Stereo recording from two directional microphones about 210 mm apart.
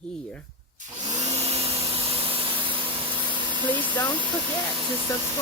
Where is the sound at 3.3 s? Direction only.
20° right (ahead or behind).